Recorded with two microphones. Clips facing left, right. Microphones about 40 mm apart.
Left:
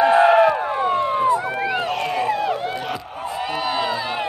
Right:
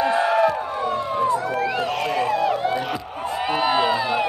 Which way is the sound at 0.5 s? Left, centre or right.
Left.